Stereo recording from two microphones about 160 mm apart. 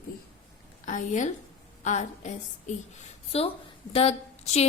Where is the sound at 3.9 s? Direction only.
40° left (ahead or behind).